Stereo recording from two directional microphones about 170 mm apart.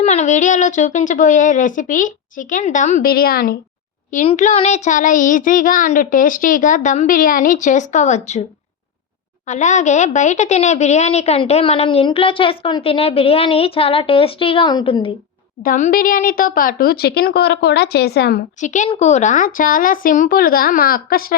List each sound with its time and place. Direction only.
0.0 s child singing: 40° left (ahead or behind)
3.1 s speech: 60° left (ahead or behind)
4.3 s child singing: 40° left (ahead or behind)
9.5 s a woman's voice: 45° left (ahead or behind); by 15.1 s 30° left (ahead or behind)
15.6 s speech: 55° left (ahead or behind); by 18.4 s 70° left (ahead or behind)
18.6 s child singing: 45° left (ahead or behind)
18.9 s speech: 40° left (ahead or behind); by 21.3 s 60° left (ahead or behind)